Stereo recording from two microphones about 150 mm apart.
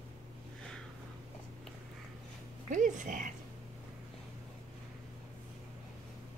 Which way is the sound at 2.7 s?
60° right (ahead or behind).